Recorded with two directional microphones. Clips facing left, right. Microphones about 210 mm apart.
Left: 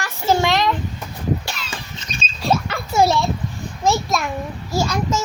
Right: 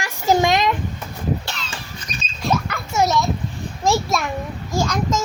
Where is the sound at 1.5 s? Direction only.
10° left (ahead or behind).